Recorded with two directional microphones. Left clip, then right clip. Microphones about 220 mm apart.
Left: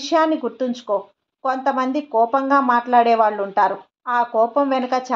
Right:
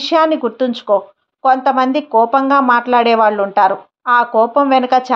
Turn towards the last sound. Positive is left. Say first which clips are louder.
# right 8 dB
turn(degrees=-30)  # may be behind; listen again after turning